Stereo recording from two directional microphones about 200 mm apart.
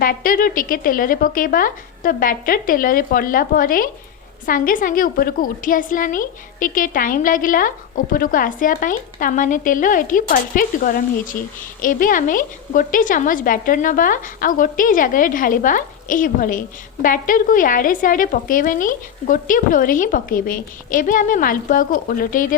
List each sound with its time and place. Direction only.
0.0 s a woman's voice: 45° left (ahead or behind)